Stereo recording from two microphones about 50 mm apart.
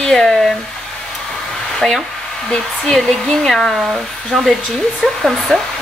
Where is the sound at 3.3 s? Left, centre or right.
Centre.